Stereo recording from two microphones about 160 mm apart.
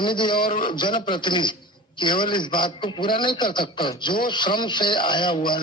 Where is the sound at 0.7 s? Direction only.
30° left (ahead or behind).